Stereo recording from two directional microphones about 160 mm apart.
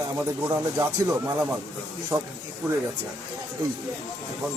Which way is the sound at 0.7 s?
20° right (ahead or behind).